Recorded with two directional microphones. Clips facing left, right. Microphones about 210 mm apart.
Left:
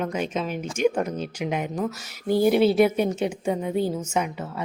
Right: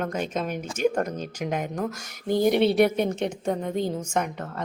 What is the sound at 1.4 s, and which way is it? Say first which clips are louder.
Speech: left 1 dB; 10° left (ahead or behind).